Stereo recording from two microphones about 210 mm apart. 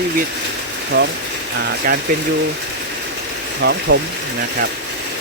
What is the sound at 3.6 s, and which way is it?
Speech, 60° right (ahead or behind).